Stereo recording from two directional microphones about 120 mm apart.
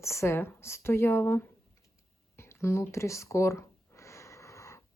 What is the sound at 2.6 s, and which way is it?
Speech, 25° left (ahead or behind).